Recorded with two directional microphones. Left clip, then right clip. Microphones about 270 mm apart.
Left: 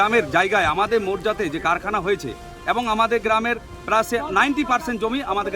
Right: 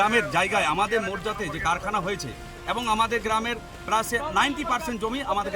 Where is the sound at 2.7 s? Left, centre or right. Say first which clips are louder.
Left 4 dB; centre.